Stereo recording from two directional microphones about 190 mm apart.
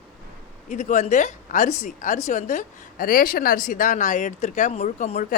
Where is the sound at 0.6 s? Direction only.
40° left (ahead or behind).